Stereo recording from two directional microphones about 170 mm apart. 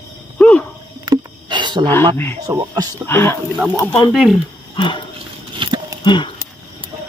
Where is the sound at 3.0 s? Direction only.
15° left (ahead or behind).